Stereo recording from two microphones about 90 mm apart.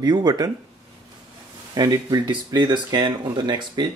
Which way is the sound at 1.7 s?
50° right (ahead or behind).